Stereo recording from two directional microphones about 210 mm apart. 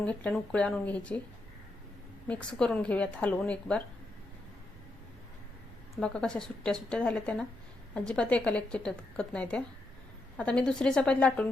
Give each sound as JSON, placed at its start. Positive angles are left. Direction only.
{"t": 0.0, "sound": "a woman's voice", "side_deg": 5}
{"t": 2.2, "sound": "a woman's voice", "side_deg": 5}
{"t": 6.0, "sound": "a woman's voice", "side_deg": 5}